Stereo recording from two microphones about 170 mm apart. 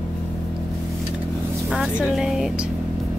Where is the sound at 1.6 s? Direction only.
5° right (ahead or behind).